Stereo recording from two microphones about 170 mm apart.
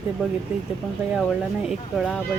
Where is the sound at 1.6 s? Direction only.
Centre (ahead or behind).